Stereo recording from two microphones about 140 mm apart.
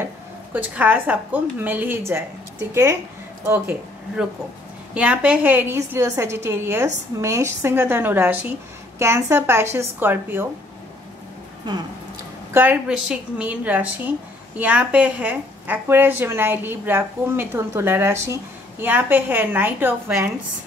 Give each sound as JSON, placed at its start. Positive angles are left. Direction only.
{"t": 0.0, "sound": "a woman's voice", "side_deg": -10}
{"t": 4.9, "sound": "a woman's voice", "side_deg": -10}
{"t": 12.5, "sound": "a woman's voice", "side_deg": -10}